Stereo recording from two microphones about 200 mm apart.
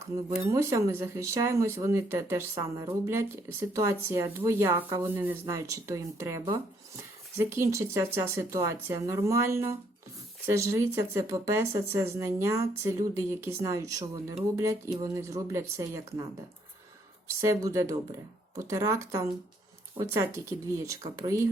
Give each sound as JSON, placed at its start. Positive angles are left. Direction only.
{"t": 0.4, "sound": "speech", "side_deg": -15}
{"t": 6.4, "sound": "speech", "side_deg": -25}
{"t": 7.3, "sound": "speech", "side_deg": -15}
{"t": 17.2, "sound": "speech", "side_deg": -15}